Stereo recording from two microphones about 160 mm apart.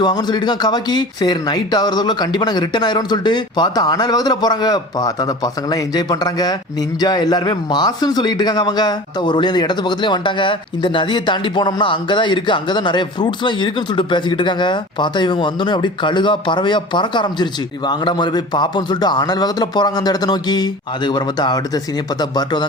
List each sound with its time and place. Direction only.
0.0 s a man's voice: 25° left (ahead or behind)